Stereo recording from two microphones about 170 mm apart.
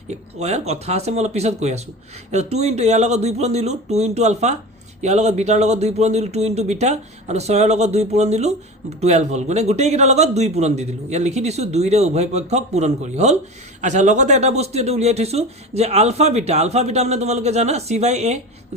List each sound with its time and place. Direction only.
0.1 s speech: 40° right (ahead or behind)